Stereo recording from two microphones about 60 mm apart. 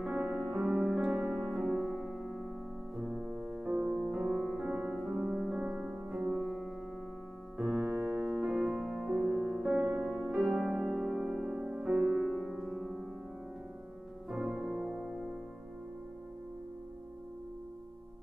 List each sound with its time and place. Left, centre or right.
0.0 s music: centre
7.5 s piano: centre
8.8 s music: centre
14.3 s music: centre